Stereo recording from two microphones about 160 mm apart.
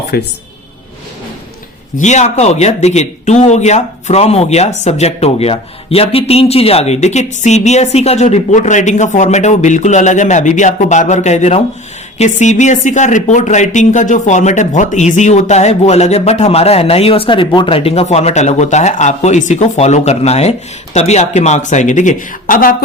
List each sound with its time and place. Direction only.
0.1 s speech: 90° left
2.0 s speech: 45° left (ahead or behind)